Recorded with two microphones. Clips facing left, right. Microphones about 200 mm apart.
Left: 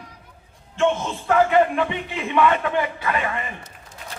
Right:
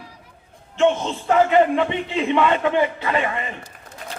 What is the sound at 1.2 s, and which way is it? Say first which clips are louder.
A man's voice: right 1 dB; 20° right (ahead or behind).